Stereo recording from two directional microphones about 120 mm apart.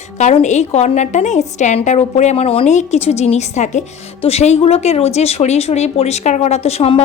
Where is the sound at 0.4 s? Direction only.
70° left (ahead or behind); by 2.6 s 55° left (ahead or behind).